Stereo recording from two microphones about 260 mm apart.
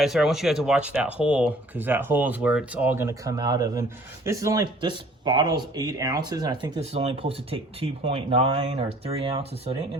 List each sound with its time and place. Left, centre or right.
0.0 s speech: centre; by 9.7 s right